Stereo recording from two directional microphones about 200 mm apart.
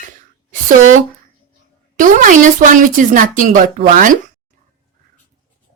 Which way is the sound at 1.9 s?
40° right (ahead or behind).